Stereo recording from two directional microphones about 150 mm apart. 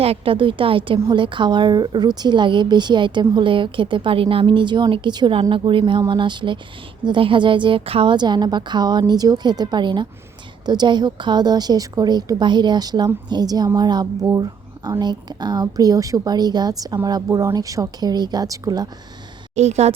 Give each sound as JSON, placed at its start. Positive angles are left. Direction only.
{"t": 0.0, "sound": "a woman's voice", "side_deg": -40}
{"t": 19.5, "sound": "speech", "side_deg": -45}